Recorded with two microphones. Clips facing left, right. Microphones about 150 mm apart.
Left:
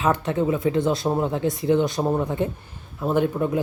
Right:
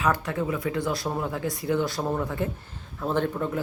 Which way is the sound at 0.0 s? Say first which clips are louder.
Left 4 dB; 25° left (ahead or behind).